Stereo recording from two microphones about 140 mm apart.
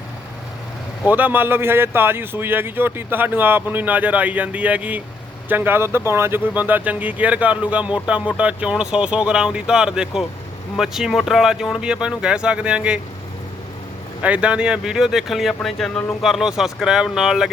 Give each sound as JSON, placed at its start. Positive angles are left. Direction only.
{"t": 1.0, "sound": "speech", "side_deg": -10}
{"t": 14.2, "sound": "speech", "side_deg": -10}